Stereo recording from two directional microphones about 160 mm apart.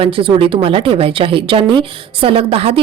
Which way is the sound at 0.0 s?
35° right (ahead or behind).